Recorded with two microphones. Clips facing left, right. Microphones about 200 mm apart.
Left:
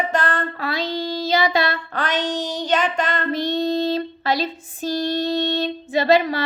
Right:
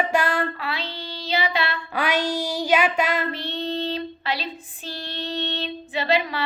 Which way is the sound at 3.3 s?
40° left (ahead or behind).